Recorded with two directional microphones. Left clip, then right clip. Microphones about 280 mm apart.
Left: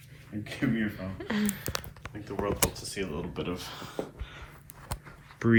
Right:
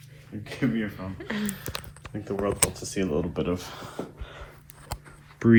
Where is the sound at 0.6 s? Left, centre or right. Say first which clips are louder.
Right 3 dB; centre.